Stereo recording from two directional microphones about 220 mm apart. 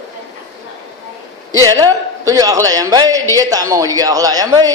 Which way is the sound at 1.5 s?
15° right (ahead or behind).